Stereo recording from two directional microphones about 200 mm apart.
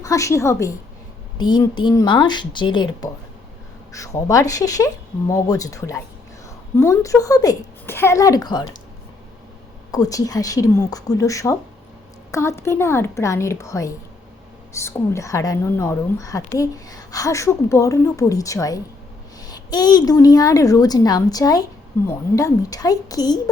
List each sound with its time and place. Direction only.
0.0 s a woman's voice: 15° left (ahead or behind)
9.9 s a woman's voice: 15° left (ahead or behind)